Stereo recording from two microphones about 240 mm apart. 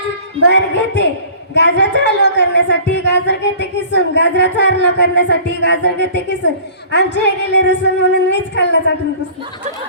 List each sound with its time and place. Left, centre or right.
0.4 s a woman's voice: left